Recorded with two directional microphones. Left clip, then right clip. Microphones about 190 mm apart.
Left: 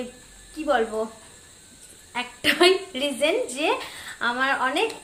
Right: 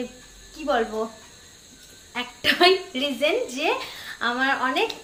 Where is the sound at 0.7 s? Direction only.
20° left (ahead or behind).